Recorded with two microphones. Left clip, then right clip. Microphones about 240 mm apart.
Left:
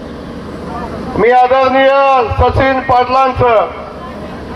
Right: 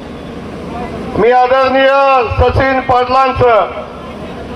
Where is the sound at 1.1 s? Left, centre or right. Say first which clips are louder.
Even; right.